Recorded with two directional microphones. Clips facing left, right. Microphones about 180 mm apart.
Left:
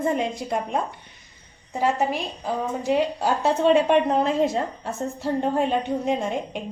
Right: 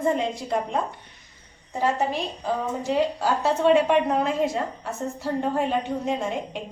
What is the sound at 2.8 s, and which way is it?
A woman's voice, 20° left (ahead or behind).